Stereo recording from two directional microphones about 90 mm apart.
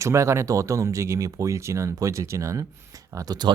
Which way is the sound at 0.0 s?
35° right (ahead or behind).